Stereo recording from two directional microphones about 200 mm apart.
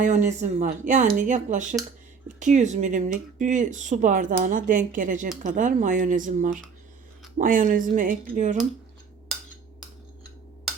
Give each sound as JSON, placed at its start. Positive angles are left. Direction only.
{"t": 0.0, "sound": "speech", "side_deg": -40}